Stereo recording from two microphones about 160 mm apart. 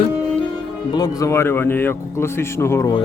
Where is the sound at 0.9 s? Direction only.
20° left (ahead or behind).